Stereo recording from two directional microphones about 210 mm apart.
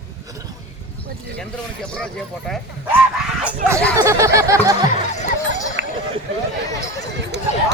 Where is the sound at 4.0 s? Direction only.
15° right (ahead or behind).